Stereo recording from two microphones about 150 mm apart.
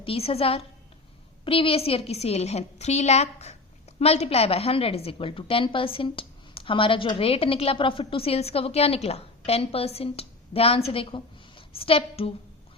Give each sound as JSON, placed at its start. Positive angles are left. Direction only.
{"t": 0.0, "sound": "a woman's voice", "side_deg": 40}